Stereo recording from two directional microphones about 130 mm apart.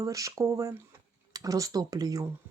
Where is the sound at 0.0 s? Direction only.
25° right (ahead or behind).